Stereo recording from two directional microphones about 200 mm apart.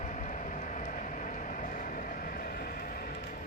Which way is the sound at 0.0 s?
40° left (ahead or behind).